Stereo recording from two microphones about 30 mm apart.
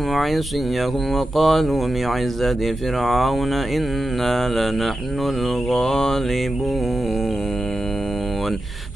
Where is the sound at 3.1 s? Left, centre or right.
Centre.